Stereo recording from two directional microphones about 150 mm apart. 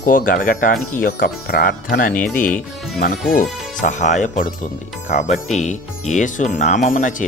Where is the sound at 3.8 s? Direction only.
55° left (ahead or behind).